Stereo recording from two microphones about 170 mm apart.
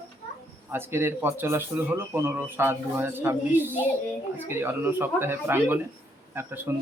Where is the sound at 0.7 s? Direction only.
15° right (ahead or behind).